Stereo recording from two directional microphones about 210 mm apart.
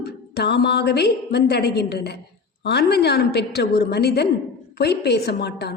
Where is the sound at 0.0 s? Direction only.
50° left (ahead or behind).